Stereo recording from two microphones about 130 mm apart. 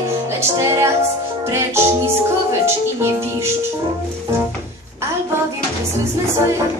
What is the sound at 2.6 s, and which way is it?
Music, 20° right (ahead or behind).